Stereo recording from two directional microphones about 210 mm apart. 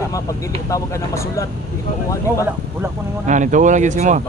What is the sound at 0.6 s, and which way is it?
Speech, 15° left (ahead or behind).